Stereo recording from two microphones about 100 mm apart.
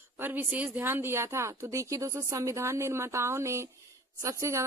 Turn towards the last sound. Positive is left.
turn(degrees=-30)  # may be behind; listen again after turning